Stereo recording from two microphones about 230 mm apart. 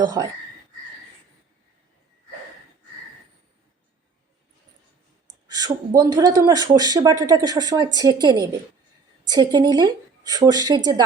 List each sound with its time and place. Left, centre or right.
0.0 s speech: centre
5.5 s speech: centre